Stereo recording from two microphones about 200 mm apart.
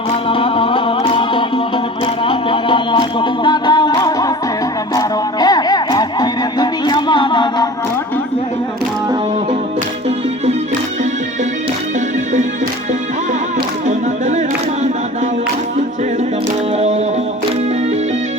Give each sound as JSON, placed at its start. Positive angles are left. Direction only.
{"t": 0.3, "sound": "music", "side_deg": 25}
{"t": 11.9, "sound": "music", "side_deg": -35}
{"t": 13.8, "sound": "music", "side_deg": -35}
{"t": 16.7, "sound": "music", "side_deg": -35}